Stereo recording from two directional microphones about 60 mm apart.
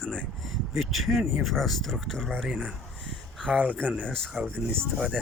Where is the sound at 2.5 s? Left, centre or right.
Centre.